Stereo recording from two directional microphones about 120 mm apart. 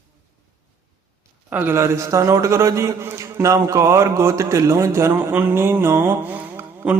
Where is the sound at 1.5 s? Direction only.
15° right (ahead or behind).